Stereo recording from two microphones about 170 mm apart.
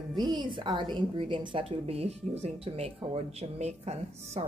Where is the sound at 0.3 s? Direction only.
30° right (ahead or behind).